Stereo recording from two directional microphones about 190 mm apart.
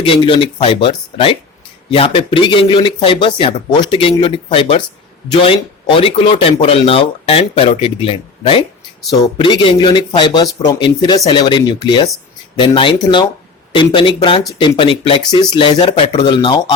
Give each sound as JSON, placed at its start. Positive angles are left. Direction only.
{"t": 0.0, "sound": "speech", "side_deg": 30}